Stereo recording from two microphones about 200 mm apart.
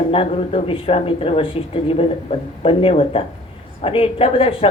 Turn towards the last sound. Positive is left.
turn(degrees=25)  # may be behind; listen again after turning